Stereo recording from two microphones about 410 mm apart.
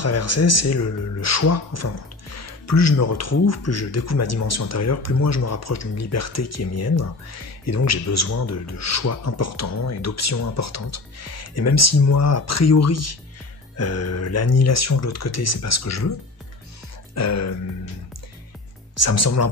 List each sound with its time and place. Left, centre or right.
0.0 s speech: left
17.1 s speech: left
18.9 s speech: left